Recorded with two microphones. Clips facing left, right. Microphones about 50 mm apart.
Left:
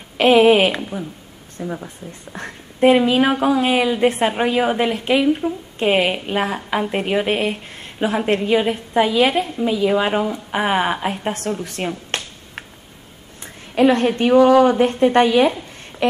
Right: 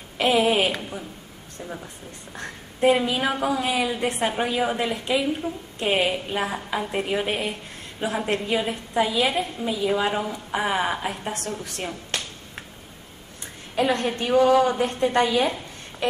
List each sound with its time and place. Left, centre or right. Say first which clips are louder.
0.2 s a woman's voice: left 8 dB; left
0.7 s speech: left 6 dB; centre
2.3 s a woman's voice: left 2 dB; left
5.4 s a woman's voice: left 7 dB; left
6.0 s a woman's voice: left 5 dB; left
13.7 s a woman's voice: left 8 dB; left